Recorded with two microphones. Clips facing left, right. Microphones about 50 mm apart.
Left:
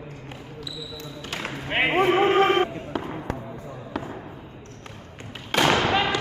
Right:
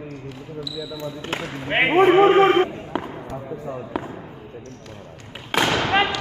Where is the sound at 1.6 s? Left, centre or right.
Centre.